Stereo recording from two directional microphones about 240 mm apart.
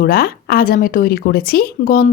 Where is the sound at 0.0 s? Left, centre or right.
Left.